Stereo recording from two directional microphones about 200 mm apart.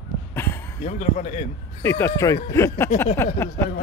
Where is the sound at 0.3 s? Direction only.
10° left (ahead or behind).